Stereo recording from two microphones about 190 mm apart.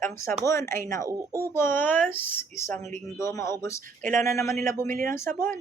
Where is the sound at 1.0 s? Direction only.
20° right (ahead or behind).